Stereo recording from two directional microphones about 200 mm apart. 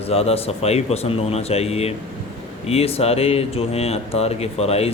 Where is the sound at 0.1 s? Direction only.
30° left (ahead or behind).